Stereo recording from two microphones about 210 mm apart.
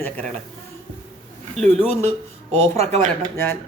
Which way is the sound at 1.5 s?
30° right (ahead or behind).